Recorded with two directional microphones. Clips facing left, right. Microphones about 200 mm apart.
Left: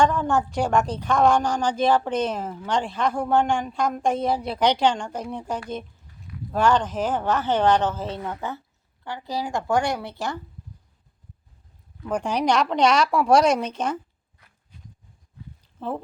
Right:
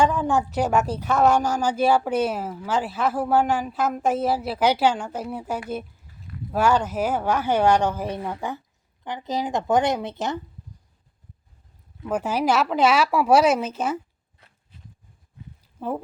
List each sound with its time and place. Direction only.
0.0 s a woman's voice: 5° right (ahead or behind)
12.0 s a woman's voice: 5° right (ahead or behind)
15.6 s a sound: 10° right (ahead or behind)